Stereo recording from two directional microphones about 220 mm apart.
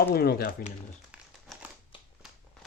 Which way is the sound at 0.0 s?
45° left (ahead or behind).